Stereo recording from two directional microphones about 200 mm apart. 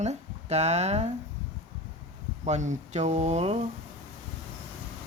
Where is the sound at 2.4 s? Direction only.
35° right (ahead or behind).